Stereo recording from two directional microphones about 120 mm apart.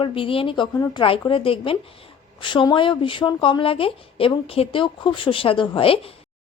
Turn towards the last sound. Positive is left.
turn(degrees=50)  # may be behind; listen again after turning